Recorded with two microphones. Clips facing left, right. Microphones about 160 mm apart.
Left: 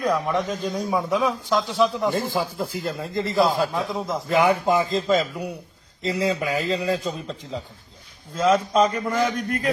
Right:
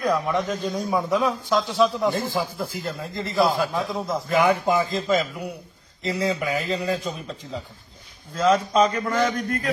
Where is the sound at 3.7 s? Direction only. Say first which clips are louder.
Even; centre (ahead or behind).